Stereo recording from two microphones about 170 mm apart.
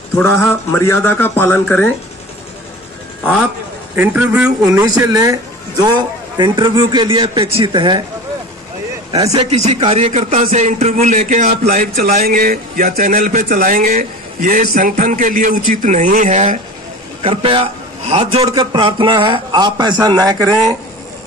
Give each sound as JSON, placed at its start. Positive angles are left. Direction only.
{"t": 0.4, "sound": "speech", "side_deg": 15}
{"t": 3.9, "sound": "a man's voice", "side_deg": -10}
{"t": 4.6, "sound": "a man's voice", "side_deg": -20}
{"t": 9.5, "sound": "a man's voice", "side_deg": -40}
{"t": 17.2, "sound": "a man's voice", "side_deg": -30}